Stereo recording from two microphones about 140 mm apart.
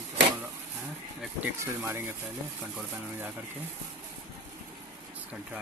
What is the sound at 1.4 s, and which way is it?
Speech, 15° right (ahead or behind).